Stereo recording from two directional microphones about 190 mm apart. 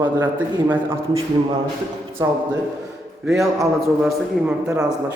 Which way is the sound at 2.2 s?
20° right (ahead or behind).